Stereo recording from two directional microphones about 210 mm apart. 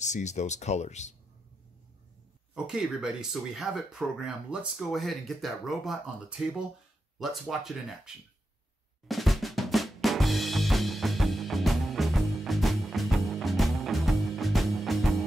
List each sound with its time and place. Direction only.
0.0 s speech: 35° left (ahead or behind)
2.5 s speech: 5° right (ahead or behind)
9.0 s drum: centre (ahead or behind)